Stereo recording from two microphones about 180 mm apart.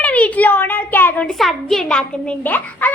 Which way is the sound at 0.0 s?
10° left (ahead or behind).